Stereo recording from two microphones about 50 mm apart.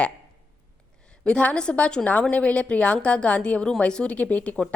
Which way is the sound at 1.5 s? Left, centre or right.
Left.